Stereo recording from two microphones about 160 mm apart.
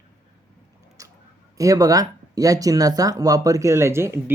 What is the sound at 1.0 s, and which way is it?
Clicking, 20° right (ahead or behind).